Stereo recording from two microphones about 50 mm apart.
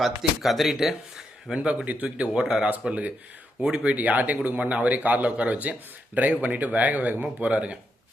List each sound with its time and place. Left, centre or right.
0.0 s speech: centre
1.6 s speech: right
2.4 s speech: centre
3.9 s a man's voice: right
7.4 s speech: right